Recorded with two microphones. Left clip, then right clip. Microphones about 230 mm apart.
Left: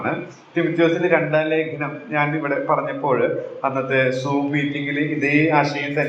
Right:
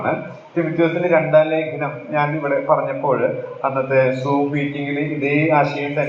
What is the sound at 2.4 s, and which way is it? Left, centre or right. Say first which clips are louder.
Speech: right 3 dB; left.